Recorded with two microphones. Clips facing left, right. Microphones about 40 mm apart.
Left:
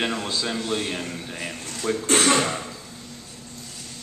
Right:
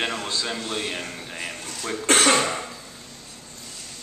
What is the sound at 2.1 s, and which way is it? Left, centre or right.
Speech, right.